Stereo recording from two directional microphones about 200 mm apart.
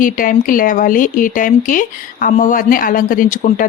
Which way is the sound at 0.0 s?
45° left (ahead or behind).